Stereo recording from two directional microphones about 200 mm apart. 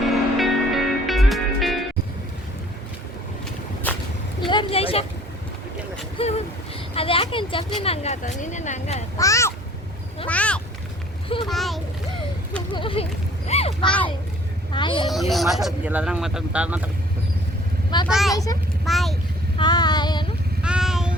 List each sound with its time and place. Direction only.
0.3 s music: centre (ahead or behind)
3.9 s walk: 10° left (ahead or behind)
4.4 s a sound: 25° left (ahead or behind)
6.1 s vehicle: 30° left (ahead or behind)
6.9 s speech: 25° left (ahead or behind)
9.1 s a child's voice: 15° left (ahead or behind)
10.2 s a sound: 5° left (ahead or behind)
12.7 s a sound: 25° left (ahead or behind)
15.0 s speech: centre (ahead or behind)
18.1 s a child's voice: centre (ahead or behind)
19.5 s child singing: 20° left (ahead or behind)
20.6 s vehicle: 5° right (ahead or behind)